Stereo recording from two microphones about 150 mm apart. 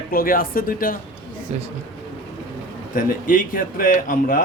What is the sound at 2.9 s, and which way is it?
A man's voice, 70° left (ahead or behind).